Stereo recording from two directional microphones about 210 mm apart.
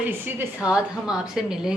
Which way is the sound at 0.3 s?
5° right (ahead or behind).